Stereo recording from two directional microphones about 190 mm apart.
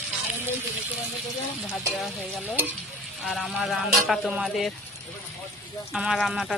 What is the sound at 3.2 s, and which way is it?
Speech, centre (ahead or behind).